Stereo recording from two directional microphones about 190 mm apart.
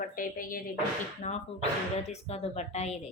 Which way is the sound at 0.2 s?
45° left (ahead or behind).